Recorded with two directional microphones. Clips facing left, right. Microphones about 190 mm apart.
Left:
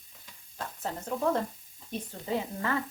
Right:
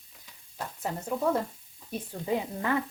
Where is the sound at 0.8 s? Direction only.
10° right (ahead or behind).